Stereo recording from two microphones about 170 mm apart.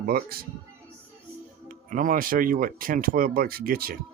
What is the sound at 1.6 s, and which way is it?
Speech, 50° right (ahead or behind).